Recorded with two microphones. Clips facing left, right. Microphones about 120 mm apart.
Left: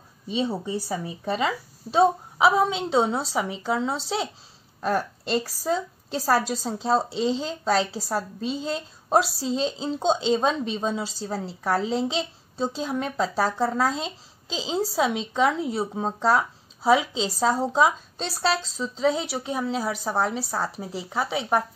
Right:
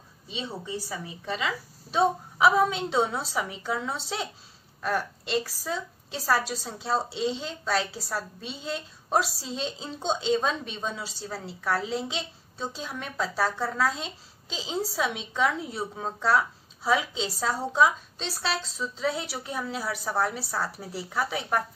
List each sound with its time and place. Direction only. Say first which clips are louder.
0.4 s a woman's voice: left 8 dB; 45° left (ahead or behind)
2.3 s a woman's voice: left 1 dB; 25° left (ahead or behind); by 6.4 s 45° left (ahead or behind)
6.6 s a woman's voice: left 5 dB; 35° left (ahead or behind)
18.9 s a woman's voice: left 7 dB; 25° left (ahead or behind)